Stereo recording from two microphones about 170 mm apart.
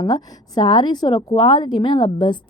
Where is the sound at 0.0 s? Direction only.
25° left (ahead or behind).